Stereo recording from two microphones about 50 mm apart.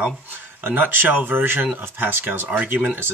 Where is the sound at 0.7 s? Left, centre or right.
Right.